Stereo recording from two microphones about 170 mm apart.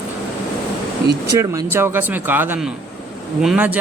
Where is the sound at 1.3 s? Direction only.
20° right (ahead or behind).